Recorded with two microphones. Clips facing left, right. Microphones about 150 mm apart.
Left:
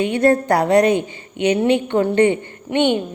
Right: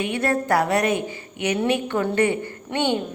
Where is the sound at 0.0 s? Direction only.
30° left (ahead or behind).